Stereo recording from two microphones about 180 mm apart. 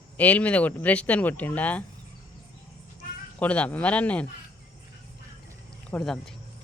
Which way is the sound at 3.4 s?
5° left (ahead or behind).